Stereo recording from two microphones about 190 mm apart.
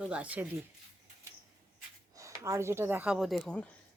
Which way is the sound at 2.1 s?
15° right (ahead or behind).